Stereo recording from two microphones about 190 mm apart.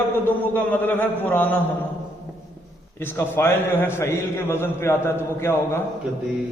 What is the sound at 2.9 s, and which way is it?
A man's voice, 10° left (ahead or behind).